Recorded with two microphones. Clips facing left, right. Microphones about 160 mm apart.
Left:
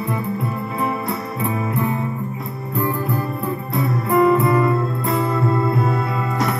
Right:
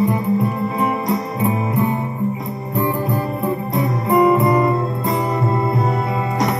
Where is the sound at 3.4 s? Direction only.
15° right (ahead or behind).